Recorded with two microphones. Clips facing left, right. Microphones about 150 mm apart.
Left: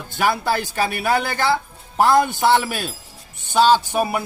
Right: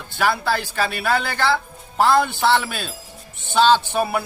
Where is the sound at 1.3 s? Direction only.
15° left (ahead or behind).